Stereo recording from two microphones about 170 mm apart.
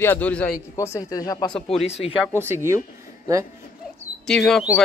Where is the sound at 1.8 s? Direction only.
40° left (ahead or behind).